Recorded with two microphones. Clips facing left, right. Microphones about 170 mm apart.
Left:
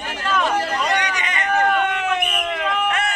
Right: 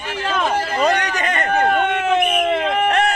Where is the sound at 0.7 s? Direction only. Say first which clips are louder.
Right 4 dB; 45° right (ahead or behind).